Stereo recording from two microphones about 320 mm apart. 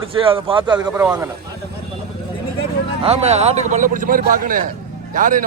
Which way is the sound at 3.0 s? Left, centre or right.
Centre.